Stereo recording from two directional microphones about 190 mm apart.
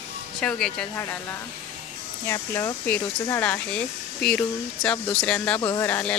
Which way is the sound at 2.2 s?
15° left (ahead or behind).